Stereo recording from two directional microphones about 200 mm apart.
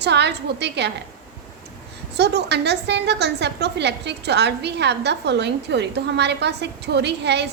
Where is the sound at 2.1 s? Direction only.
55° right (ahead or behind).